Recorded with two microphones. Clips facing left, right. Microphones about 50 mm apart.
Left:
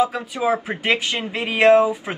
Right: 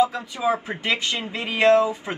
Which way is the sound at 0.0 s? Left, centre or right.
Left.